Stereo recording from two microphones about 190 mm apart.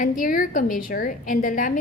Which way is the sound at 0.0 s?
45° left (ahead or behind).